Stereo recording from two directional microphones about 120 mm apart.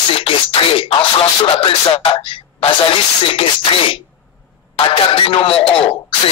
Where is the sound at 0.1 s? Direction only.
50° left (ahead or behind).